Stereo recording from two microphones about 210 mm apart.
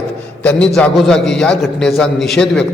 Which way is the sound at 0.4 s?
5° left (ahead or behind).